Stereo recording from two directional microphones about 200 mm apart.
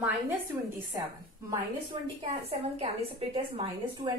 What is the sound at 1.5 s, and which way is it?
A woman's voice, 25° right (ahead or behind).